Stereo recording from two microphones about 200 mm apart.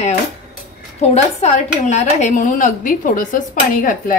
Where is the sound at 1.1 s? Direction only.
35° left (ahead or behind).